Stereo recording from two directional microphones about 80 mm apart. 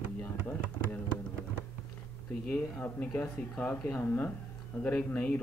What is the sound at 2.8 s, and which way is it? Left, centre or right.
A man's voice, centre.